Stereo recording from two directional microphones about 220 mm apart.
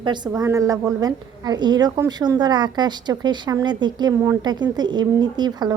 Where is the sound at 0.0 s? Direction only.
20° right (ahead or behind).